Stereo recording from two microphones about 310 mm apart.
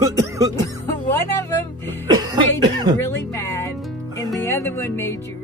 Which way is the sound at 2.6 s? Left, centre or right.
Centre.